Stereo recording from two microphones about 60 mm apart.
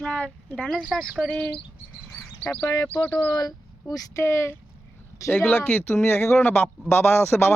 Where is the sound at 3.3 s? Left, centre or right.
Left.